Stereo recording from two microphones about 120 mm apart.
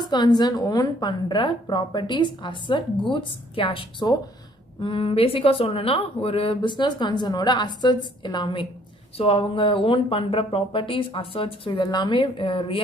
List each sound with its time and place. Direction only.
0.0 s a woman's voice: 35° left (ahead or behind)
4.8 s speech: 50° left (ahead or behind)